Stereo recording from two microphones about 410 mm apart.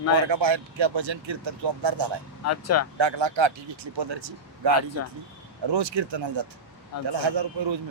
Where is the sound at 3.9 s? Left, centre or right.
Right.